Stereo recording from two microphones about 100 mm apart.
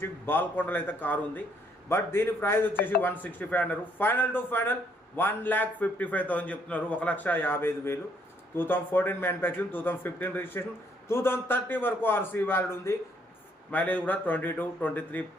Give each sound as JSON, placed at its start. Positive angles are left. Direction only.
{"t": 0.0, "sound": "a man's voice", "side_deg": 20}
{"t": 13.7, "sound": "a man's voice", "side_deg": 15}